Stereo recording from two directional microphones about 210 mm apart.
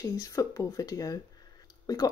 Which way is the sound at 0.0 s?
15° left (ahead or behind).